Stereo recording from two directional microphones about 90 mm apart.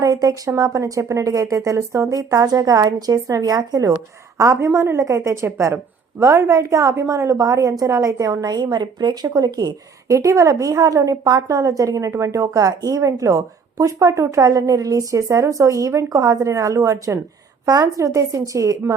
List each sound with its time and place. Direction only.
0.0 s a woman's voice: 45° right (ahead or behind)